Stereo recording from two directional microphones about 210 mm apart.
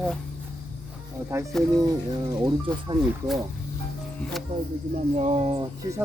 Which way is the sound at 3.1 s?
Centre (ahead or behind).